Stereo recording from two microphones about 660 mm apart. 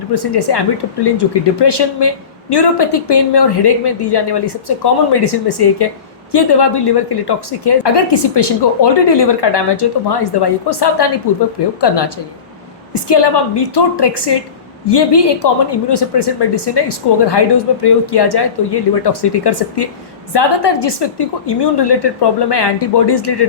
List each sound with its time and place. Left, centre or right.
0.1 s speech: left